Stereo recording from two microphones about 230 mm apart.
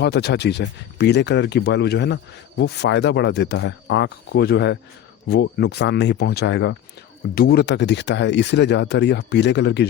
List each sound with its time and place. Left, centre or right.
0.0 s speech: left